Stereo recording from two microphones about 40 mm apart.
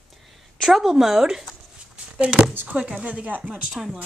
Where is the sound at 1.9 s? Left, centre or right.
Right.